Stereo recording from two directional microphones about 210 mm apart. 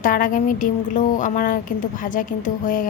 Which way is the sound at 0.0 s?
40° left (ahead or behind).